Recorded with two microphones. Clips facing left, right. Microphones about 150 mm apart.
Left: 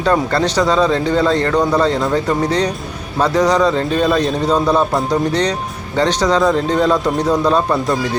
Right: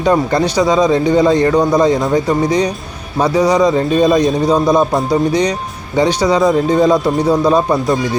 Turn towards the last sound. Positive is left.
turn(degrees=-10)  # may be behind; listen again after turning